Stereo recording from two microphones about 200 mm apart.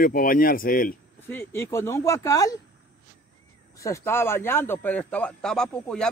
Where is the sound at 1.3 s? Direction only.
10° left (ahead or behind).